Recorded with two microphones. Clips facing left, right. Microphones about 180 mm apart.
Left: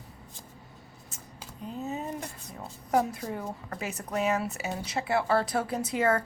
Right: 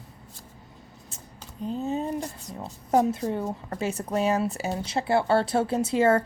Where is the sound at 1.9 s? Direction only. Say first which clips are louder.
Right 6 dB; 30° right (ahead or behind).